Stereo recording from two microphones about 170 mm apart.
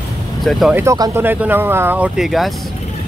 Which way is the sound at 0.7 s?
20° right (ahead or behind).